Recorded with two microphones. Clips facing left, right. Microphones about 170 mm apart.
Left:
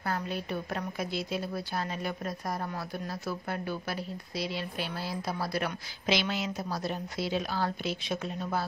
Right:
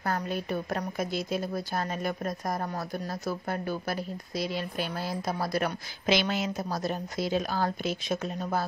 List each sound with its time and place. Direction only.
0.0 s a woman's voice: 45° right (ahead or behind)